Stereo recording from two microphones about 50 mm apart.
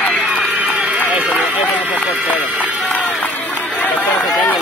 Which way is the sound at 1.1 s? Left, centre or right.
Right.